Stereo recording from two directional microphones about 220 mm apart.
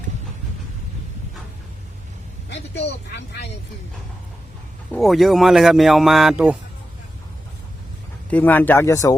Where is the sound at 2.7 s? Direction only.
50° left (ahead or behind).